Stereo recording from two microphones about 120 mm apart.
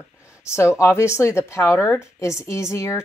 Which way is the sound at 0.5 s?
20° left (ahead or behind).